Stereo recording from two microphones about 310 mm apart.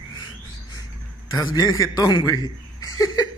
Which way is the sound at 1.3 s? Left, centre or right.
Centre.